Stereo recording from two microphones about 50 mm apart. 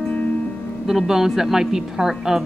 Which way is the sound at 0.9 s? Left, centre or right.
Centre.